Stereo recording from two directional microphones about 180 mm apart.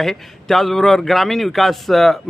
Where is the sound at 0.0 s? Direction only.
Centre (ahead or behind).